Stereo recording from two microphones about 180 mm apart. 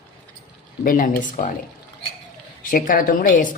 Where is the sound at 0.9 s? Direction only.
50° left (ahead or behind).